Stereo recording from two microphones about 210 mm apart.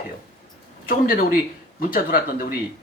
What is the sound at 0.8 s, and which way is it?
Speech, 45° left (ahead or behind).